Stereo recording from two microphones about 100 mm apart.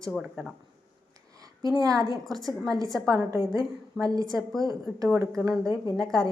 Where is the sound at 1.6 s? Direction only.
35° right (ahead or behind).